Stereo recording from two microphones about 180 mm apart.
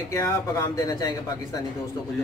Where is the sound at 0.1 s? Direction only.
15° left (ahead or behind).